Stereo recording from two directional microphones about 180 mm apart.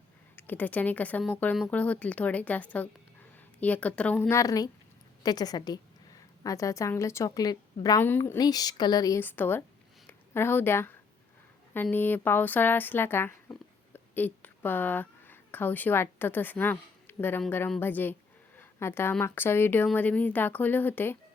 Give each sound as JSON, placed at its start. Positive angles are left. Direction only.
{"t": 0.3, "sound": "a woman's voice", "side_deg": 10}